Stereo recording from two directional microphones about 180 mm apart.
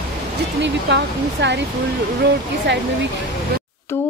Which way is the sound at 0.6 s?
75° right (ahead or behind).